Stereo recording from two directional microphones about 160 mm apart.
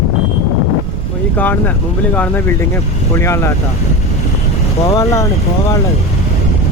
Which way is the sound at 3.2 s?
15° left (ahead or behind).